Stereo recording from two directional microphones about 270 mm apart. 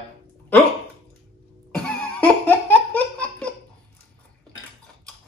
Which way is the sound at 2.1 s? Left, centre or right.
Centre.